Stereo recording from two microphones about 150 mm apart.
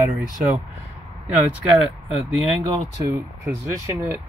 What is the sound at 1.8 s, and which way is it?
Speech, 5° right (ahead or behind).